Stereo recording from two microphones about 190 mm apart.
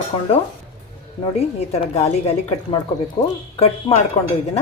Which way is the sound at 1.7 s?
35° left (ahead or behind).